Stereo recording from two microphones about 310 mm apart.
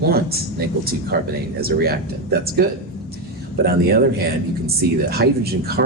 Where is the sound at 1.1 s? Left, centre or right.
Right.